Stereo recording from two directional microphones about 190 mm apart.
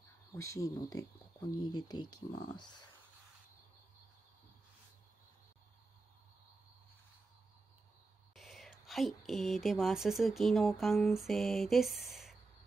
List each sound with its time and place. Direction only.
0.3 s speech: 15° left (ahead or behind)
8.4 s speech: centre (ahead or behind)